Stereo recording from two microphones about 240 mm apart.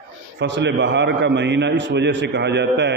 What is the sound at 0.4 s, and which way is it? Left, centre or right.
A man's voice, right.